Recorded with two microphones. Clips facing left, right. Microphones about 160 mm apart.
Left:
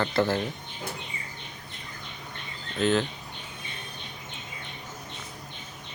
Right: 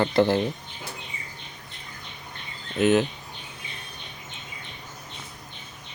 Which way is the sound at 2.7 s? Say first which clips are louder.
Right 4 dB; 20° right (ahead or behind).